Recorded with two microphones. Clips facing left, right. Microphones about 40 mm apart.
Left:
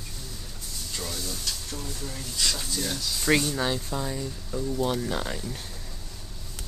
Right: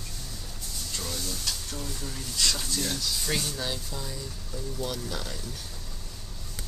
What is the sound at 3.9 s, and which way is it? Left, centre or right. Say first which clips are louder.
Speech: left 6 dB; left.